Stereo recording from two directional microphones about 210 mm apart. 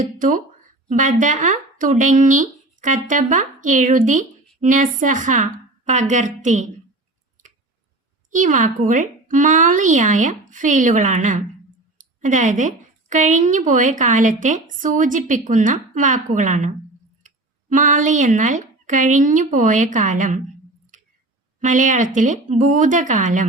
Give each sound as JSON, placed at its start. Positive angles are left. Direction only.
{"t": 0.0, "sound": "speech", "side_deg": -40}
{"t": 8.3, "sound": "a woman's voice", "side_deg": -40}
{"t": 21.6, "sound": "a woman's voice", "side_deg": -40}